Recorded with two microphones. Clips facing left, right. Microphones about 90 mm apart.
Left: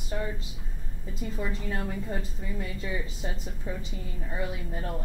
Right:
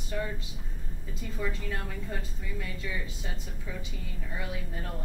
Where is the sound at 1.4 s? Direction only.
25° left (ahead or behind).